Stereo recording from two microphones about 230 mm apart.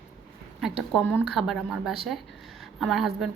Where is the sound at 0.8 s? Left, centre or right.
Centre.